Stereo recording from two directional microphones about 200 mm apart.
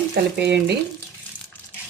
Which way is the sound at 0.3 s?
55° right (ahead or behind).